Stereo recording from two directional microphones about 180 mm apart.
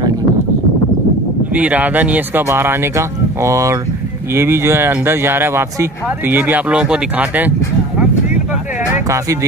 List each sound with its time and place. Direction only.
1.5 s speech: 10° right (ahead or behind)